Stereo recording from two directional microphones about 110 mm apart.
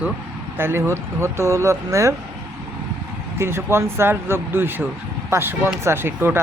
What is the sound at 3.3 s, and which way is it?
Speech, 20° right (ahead or behind).